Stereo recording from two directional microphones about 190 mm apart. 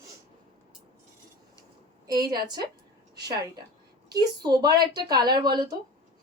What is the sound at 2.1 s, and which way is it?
Speech, 20° right (ahead or behind).